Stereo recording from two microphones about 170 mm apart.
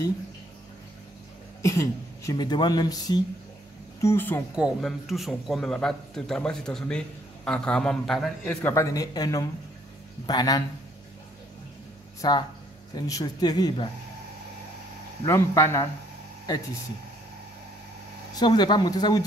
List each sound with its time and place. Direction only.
1.6 s speech: 20° left (ahead or behind)
4.6 s a man's voice: 5° right (ahead or behind)
8.6 s speech: 15° left (ahead or behind)
12.2 s speech: 25° left (ahead or behind)
15.2 s speech: 15° left (ahead or behind)
18.3 s speech: 25° left (ahead or behind)